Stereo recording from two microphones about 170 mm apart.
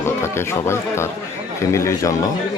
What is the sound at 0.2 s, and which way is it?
Speech, 15° left (ahead or behind).